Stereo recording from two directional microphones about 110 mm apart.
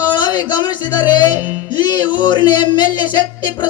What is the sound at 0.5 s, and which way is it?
Speech, 40° left (ahead or behind).